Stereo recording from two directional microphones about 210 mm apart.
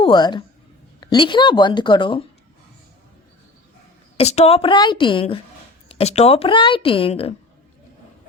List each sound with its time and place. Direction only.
0.0 s speech: 20° left (ahead or behind)
4.2 s speech: 30° left (ahead or behind)